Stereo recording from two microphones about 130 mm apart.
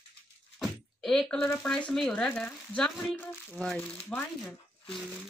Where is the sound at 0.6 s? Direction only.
5° left (ahead or behind).